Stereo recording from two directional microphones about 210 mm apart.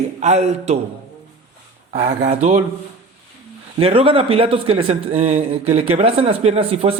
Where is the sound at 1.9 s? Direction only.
30° right (ahead or behind).